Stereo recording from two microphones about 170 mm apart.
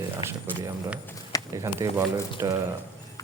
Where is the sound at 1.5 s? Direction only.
15° right (ahead or behind).